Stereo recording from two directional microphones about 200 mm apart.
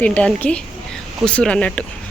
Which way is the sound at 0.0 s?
5° left (ahead or behind).